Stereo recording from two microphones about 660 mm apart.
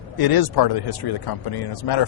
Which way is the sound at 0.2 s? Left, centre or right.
Left.